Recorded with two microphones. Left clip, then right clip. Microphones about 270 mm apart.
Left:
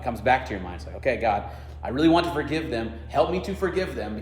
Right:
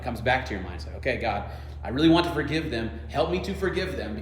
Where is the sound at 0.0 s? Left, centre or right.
Left.